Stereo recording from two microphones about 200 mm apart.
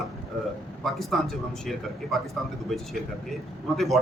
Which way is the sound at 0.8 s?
Centre (ahead or behind).